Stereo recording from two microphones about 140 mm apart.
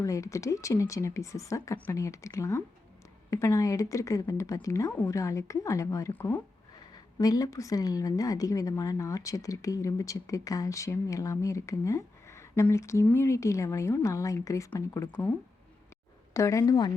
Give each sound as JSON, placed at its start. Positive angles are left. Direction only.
{"t": 0.0, "sound": "a woman's voice", "side_deg": 25}
{"t": 16.3, "sound": "a woman's voice", "side_deg": 20}